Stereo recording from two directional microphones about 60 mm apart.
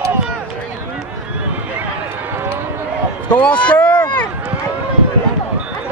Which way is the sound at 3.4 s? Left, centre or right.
Centre.